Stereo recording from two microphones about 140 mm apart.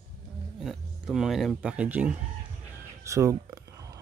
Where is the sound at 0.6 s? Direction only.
Centre (ahead or behind).